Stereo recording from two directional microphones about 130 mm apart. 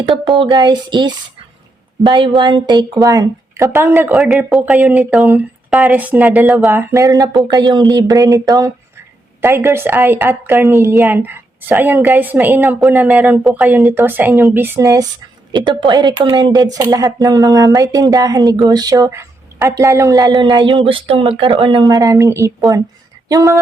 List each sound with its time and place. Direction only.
0.0 s speech: 40° right (ahead or behind)
3.7 s a woman's voice: 20° right (ahead or behind)
4.1 s a woman's voice: centre (ahead or behind)
6.7 s a woman's voice: 20° right (ahead or behind)
15.5 s speech: 35° right (ahead or behind)